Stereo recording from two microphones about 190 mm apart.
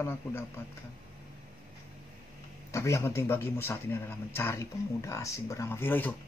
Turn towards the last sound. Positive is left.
turn(degrees=10)  # may be behind; listen again after turning